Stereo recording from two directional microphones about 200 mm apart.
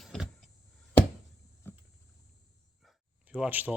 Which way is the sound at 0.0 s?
Centre (ahead or behind).